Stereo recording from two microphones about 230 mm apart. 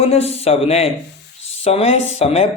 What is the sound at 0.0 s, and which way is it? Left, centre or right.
A man's voice, left.